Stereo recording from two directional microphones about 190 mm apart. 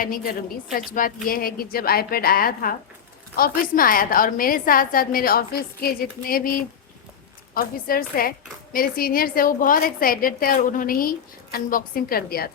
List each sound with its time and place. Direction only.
0.0 s a woman's voice: 50° left (ahead or behind)
7.5 s a woman's voice: 50° left (ahead or behind)